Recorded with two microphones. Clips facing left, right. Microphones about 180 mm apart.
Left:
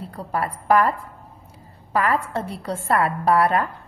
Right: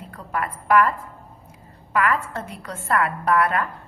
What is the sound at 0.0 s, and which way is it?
A woman's voice, 35° left (ahead or behind).